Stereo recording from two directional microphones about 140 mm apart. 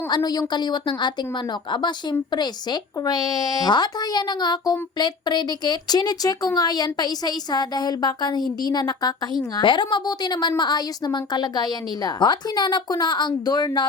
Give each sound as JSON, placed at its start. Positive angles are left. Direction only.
{"t": 0.1, "sound": "a woman's voice", "side_deg": 30}